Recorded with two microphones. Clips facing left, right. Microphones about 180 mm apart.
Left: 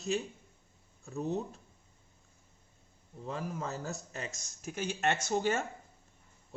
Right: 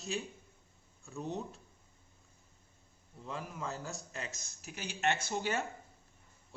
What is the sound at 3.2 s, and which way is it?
Speech, 40° left (ahead or behind).